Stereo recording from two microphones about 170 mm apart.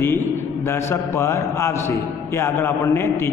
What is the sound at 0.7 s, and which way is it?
A man's voice, 15° left (ahead or behind).